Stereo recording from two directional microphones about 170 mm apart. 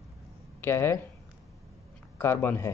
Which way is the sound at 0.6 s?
15° left (ahead or behind).